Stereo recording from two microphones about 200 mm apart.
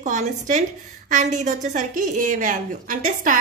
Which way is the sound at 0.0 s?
35° right (ahead or behind).